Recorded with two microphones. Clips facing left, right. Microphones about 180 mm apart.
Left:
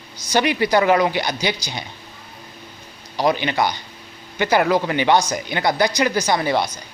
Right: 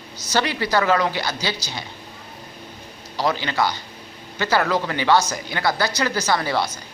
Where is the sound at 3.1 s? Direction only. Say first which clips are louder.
Left 3 dB; 15° left (ahead or behind).